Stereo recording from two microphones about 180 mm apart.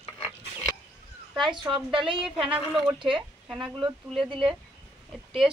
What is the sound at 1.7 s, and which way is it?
Speech, 30° right (ahead or behind).